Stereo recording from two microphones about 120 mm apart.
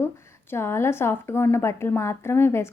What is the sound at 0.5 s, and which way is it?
A woman's voice, 20° left (ahead or behind).